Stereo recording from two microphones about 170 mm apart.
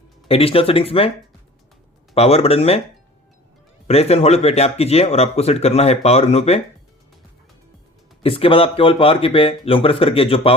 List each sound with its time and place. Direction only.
0.3 s speech: 35° left (ahead or behind)
2.1 s speech: 35° left (ahead or behind)
3.8 s speech: 35° left (ahead or behind)
8.2 s speech: 30° left (ahead or behind)